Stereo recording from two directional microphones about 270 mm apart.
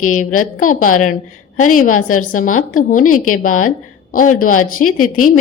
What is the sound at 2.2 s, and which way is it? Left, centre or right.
A woman's voice, left.